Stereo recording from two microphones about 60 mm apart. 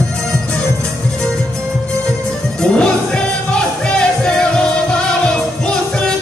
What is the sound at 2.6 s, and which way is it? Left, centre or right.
Music, centre.